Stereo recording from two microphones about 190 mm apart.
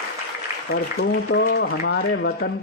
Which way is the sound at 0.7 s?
65° left (ahead or behind).